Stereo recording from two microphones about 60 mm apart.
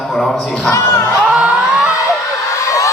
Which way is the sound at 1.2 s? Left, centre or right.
Centre.